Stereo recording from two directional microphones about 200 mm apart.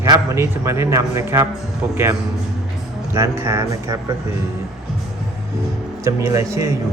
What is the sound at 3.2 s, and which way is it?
Speech, 15° right (ahead or behind).